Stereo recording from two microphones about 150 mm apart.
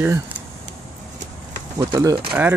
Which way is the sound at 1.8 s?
20° right (ahead or behind).